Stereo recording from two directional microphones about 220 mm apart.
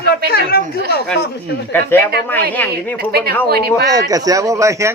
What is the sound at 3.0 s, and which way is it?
Speech, 45° right (ahead or behind).